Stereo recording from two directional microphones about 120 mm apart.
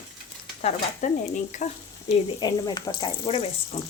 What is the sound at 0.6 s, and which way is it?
Speech, 90° left.